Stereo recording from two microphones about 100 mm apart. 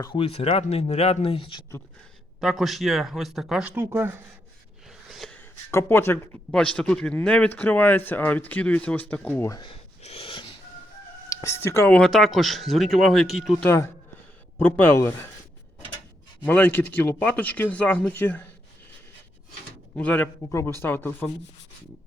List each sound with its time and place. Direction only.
0.2 s speech: 75° left (ahead or behind); by 1.6 s 60° left (ahead or behind)
2.4 s speech: centre (ahead or behind)
3.8 s speech: 25° right (ahead or behind)
4.9 s gasp: centre (ahead or behind)
5.7 s speech: 25° left (ahead or behind)
6.5 s speech: 10° left (ahead or behind)
10.0 s wheeze: 80° left; by 10.5 s 65° left (ahead or behind)
11.3 s speech: 30° left (ahead or behind)
11.9 s speech: 10° left (ahead or behind)
13.7 s speech: 25° left (ahead or behind)
16.4 s speech: 20° left (ahead or behind)
20.0 s speech: 15° left (ahead or behind)
20.2 s speech: 30° left (ahead or behind)